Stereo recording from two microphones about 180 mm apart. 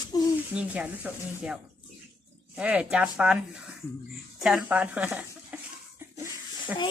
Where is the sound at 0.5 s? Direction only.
5° right (ahead or behind).